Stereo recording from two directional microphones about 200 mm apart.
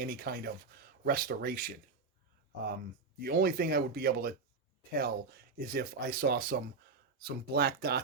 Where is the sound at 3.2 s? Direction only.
50° right (ahead or behind).